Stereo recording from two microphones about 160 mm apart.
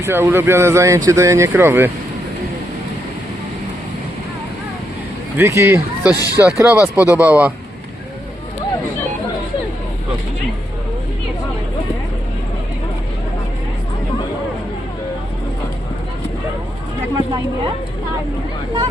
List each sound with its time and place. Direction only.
0.0 s speech: 15° right (ahead or behind)
5.4 s speech: 15° right (ahead or behind)
6.1 s speech: 20° left (ahead or behind)
6.4 s speech: 15° right (ahead or behind)